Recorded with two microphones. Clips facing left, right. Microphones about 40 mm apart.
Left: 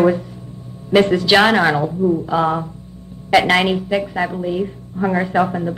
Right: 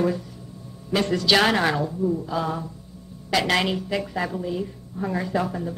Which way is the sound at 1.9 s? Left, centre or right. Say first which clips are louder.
Left 7 dB; left.